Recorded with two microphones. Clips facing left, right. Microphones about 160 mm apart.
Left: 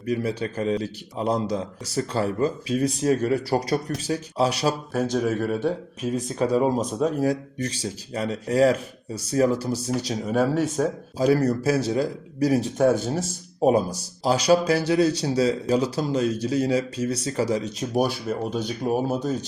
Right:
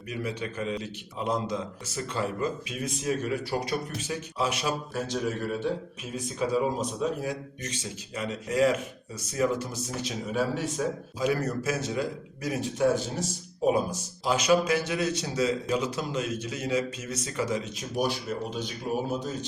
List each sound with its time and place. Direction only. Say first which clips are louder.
0.1 s a man's voice: left 8 dB; 35° left (ahead or behind)
4.9 s a man's voice: left 7 dB; 50° left (ahead or behind)
10.3 s speech: left 7 dB; 50° left (ahead or behind)
11.2 s a man's voice: left 8 dB; 35° left (ahead or behind)
12.7 s speech: left 5 dB; 55° left (ahead or behind)
13.7 s a man's voice: left 5 dB; 40° left (ahead or behind)